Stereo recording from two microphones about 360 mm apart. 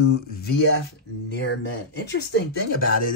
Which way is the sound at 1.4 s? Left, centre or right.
Left.